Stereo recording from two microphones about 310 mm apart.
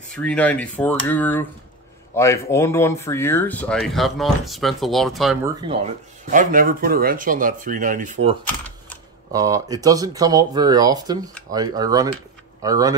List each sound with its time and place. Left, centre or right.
0.1 s speech: centre
5.6 s speech: centre